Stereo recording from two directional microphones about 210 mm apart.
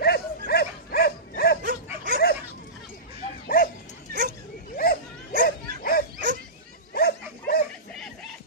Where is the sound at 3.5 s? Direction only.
45° left (ahead or behind).